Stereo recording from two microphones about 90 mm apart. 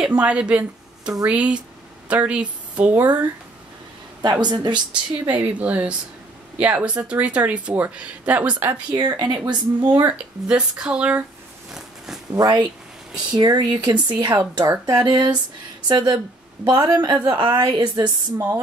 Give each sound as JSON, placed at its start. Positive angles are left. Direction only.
{"t": 0.0, "sound": "speech", "side_deg": -10}
{"t": 4.2, "sound": "a woman's voice", "side_deg": -55}
{"t": 5.3, "sound": "speech", "side_deg": -15}
{"t": 8.9, "sound": "a woman's voice", "side_deg": -50}
{"t": 9.9, "sound": "speech", "side_deg": -15}
{"t": 12.3, "sound": "a woman's voice", "side_deg": -45}